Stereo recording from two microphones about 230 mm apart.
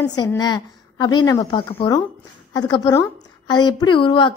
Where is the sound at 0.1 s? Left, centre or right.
Centre.